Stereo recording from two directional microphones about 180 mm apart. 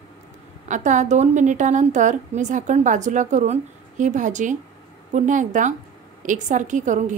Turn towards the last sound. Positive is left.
turn(degrees=-45)  # may be behind; listen again after turning